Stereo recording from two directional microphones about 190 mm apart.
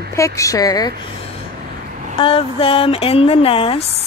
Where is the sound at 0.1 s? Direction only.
15° left (ahead or behind).